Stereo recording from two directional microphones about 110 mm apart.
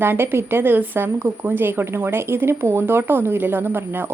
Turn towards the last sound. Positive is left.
turn(degrees=-20)  # may be behind; listen again after turning